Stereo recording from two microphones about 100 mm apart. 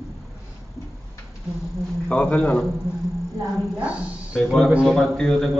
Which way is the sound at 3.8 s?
15° right (ahead or behind).